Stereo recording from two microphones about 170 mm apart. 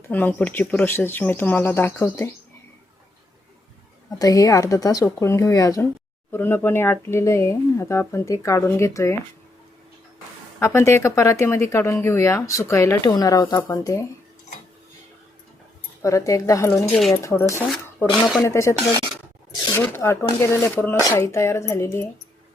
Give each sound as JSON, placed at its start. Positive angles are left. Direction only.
{"t": 0.1, "sound": "speech", "side_deg": 10}
{"t": 4.2, "sound": "speech", "side_deg": 20}
{"t": 10.6, "sound": "speech", "side_deg": 15}
{"t": 16.0, "sound": "speech", "side_deg": 20}